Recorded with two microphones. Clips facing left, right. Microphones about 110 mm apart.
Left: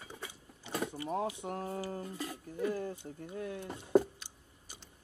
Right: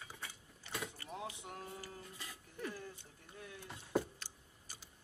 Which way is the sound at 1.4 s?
45° left (ahead or behind).